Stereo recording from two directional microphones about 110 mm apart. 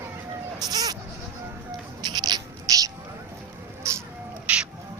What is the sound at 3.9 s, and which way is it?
Cat, 30° right (ahead or behind).